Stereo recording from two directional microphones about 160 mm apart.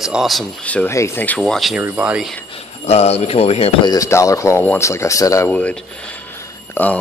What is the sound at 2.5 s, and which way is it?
Speech, 40° left (ahead or behind).